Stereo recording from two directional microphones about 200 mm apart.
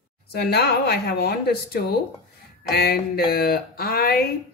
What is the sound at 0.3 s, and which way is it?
Speech, 55° left (ahead or behind).